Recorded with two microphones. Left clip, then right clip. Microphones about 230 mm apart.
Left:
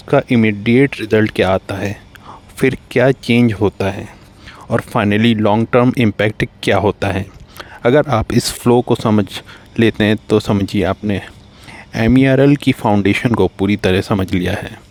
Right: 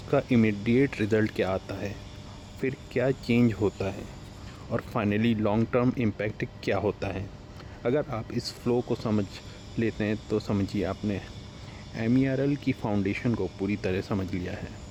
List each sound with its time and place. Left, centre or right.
0.1 s speech: left